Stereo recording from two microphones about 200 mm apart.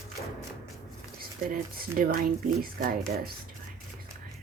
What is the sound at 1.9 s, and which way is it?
Speech, 45° right (ahead or behind).